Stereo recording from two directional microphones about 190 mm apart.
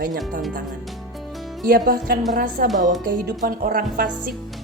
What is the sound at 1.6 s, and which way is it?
A woman's voice, 50° right (ahead or behind).